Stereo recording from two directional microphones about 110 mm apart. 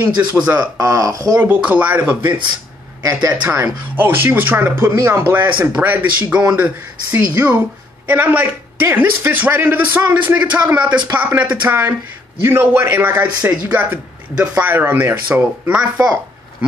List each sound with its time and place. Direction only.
0.0 s speech: 35° right (ahead or behind)
1.4 s a man's voice: 15° right (ahead or behind)
3.0 s speech: 30° right (ahead or behind)
3.6 s a man's voice: 20° right (ahead or behind)